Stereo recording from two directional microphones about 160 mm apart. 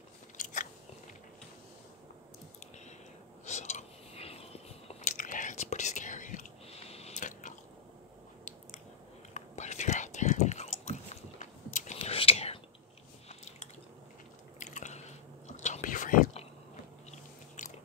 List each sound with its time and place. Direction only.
0.4 s biting: 55° left (ahead or behind)
3.4 s a sound: 45° left (ahead or behind)
9.3 s whispering: 45° left (ahead or behind)
13.3 s biting: 45° left (ahead or behind)
14.6 s chewing: 50° left (ahead or behind)
17.1 s biting: 50° left (ahead or behind)